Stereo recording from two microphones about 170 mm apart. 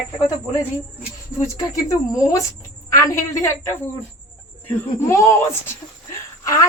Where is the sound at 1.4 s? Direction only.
20° left (ahead or behind).